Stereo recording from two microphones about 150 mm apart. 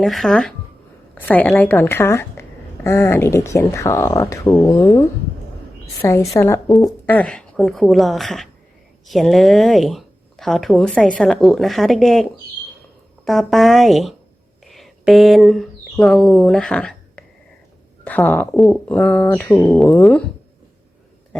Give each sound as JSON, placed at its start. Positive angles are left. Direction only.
{"t": 0.0, "sound": "a woman's voice", "side_deg": 0}
{"t": 7.1, "sound": "a woman's voice", "side_deg": 10}